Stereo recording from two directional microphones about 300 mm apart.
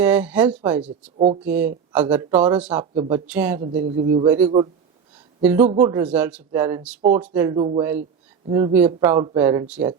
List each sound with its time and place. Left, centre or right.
0.0 s speech: centre
2.9 s speech: centre
3.8 s speech: right
5.4 s speech: centre